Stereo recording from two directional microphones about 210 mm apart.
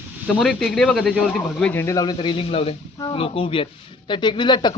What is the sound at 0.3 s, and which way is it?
Speech, centre (ahead or behind).